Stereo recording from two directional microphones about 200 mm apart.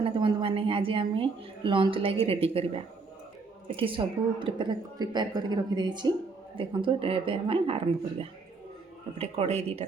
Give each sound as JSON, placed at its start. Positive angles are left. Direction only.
{"t": 0.0, "sound": "a woman's voice", "side_deg": -25}
{"t": 9.1, "sound": "speech", "side_deg": -30}